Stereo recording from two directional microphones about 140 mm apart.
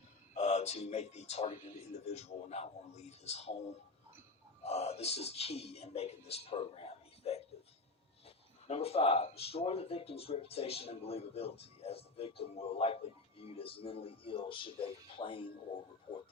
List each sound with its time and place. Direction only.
0.3 s speech: 50° left (ahead or behind)
8.6 s speech: 45° left (ahead or behind)